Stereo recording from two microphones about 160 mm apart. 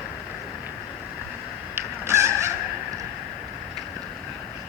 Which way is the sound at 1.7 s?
15° right (ahead or behind).